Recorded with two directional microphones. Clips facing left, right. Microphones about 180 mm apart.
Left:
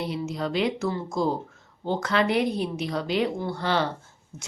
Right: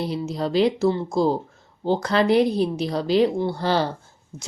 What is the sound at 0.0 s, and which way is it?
Speech, 35° right (ahead or behind).